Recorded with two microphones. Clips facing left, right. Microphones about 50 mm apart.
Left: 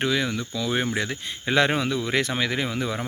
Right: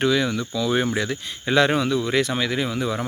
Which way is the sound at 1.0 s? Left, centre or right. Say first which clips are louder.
Right 2 dB; left.